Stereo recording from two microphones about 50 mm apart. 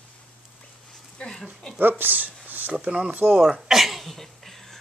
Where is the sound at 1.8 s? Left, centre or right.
Right.